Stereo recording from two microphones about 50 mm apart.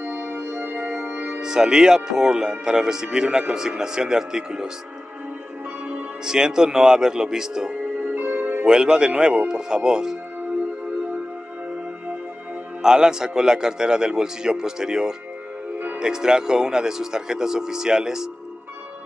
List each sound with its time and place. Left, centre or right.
0.0 s music: right
0.7 s music: right
1.4 s a man's voice: centre
6.2 s a man's voice: centre
8.0 s music: right
8.6 s a man's voice: centre
12.8 s a man's voice: centre